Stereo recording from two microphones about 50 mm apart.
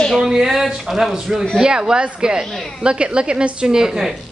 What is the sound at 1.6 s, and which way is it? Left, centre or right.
A man's voice, centre.